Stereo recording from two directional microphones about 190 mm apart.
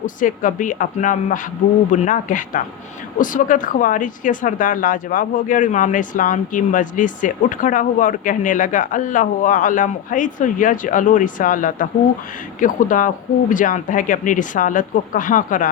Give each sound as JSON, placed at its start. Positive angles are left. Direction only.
{"t": 0.0, "sound": "speech", "side_deg": 45}